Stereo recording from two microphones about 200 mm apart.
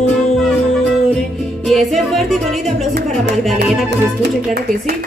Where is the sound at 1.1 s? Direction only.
Centre (ahead or behind).